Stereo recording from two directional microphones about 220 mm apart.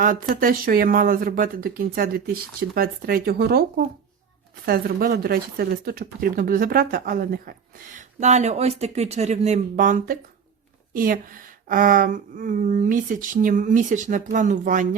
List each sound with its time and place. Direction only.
0.0 s speech: 40° right (ahead or behind)